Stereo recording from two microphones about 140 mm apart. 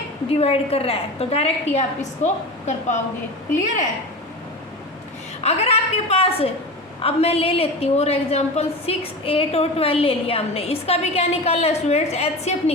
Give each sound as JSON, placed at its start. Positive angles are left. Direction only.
{"t": 0.3, "sound": "a woman's voice", "side_deg": 45}
{"t": 5.4, "sound": "a woman's voice", "side_deg": 50}